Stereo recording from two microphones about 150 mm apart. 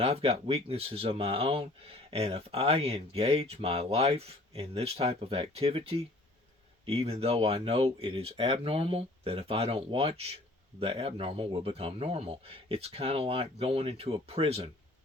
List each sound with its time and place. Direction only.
0.0 s speech: 40° right (ahead or behind)